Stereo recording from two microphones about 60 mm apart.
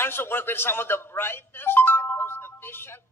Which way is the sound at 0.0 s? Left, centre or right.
Left.